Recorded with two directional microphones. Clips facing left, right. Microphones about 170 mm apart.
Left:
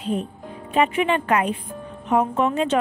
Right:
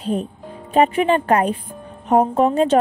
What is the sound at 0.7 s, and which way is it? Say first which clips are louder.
A woman's voice: right 4 dB; 40° right (ahead or behind).